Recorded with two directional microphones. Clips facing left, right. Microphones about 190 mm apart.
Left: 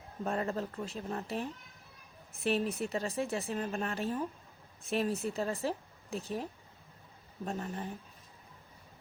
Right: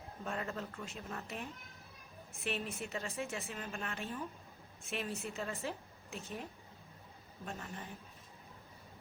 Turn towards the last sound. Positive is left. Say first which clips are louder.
# left 8 dB
turn(degrees=35)  # may be behind; listen again after turning